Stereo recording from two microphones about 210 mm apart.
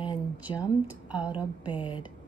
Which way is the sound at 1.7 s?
25° left (ahead or behind).